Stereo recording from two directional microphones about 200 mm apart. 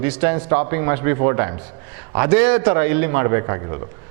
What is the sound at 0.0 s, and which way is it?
A man's voice, 10° right (ahead or behind).